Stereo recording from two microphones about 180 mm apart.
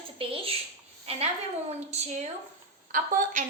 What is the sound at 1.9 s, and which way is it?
A woman's voice, 40° right (ahead or behind).